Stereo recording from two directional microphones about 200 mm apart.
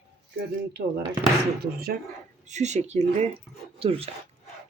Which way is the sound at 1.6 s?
50° right (ahead or behind).